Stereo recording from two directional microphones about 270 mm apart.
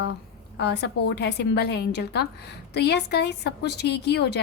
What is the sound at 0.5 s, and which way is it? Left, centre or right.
A woman's voice, left.